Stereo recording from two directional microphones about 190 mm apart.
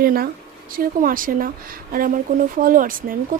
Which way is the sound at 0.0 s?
50° right (ahead or behind).